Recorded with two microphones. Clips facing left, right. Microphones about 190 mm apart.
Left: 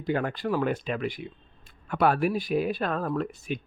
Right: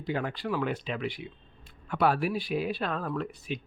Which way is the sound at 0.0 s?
50° left (ahead or behind).